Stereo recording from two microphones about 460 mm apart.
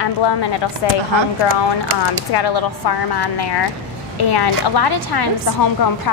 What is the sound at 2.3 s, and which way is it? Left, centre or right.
A woman's voice, left.